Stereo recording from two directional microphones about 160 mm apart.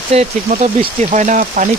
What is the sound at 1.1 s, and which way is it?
Speech, 50° right (ahead or behind).